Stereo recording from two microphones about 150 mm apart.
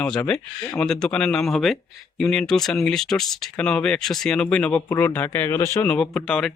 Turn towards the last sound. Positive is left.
turn(degrees=5)  # may be behind; listen again after turning